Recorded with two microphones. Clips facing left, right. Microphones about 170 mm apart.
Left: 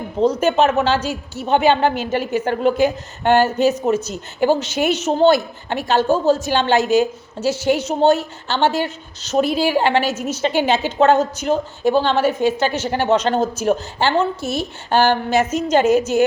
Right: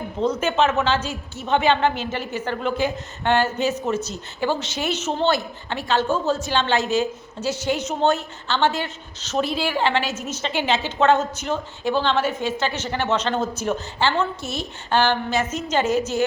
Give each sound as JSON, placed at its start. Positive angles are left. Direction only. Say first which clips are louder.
{"t": 0.2, "sound": "a woman's voice", "louder": "left 5 dB", "side_deg": 35}
{"t": 8.0, "sound": "a woman's voice", "louder": "left 6 dB", "side_deg": 40}